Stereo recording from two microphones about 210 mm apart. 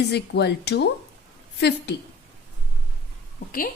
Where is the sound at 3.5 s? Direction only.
40° left (ahead or behind).